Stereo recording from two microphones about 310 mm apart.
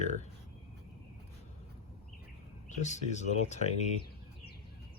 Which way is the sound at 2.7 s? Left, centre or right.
Left.